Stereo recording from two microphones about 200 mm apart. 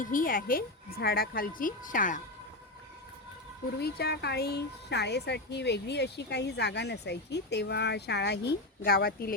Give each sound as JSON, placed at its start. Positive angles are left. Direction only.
{"t": 0.0, "sound": "speech", "side_deg": 45}
{"t": 3.8, "sound": "speech", "side_deg": 55}